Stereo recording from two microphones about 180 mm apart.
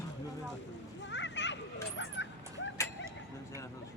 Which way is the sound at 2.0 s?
90° left.